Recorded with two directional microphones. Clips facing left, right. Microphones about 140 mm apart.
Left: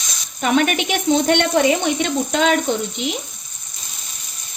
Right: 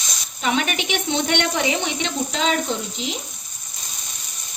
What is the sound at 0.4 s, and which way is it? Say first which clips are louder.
A woman's voice: left 5 dB; 50° left (ahead or behind).